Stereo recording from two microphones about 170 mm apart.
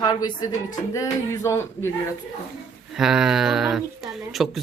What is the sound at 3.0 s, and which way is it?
Speech, 5° right (ahead or behind).